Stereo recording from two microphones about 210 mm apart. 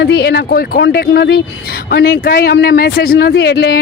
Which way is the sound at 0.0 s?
50° left (ahead or behind).